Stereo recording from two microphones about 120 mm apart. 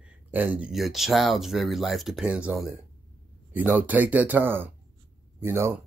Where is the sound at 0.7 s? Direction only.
Centre (ahead or behind).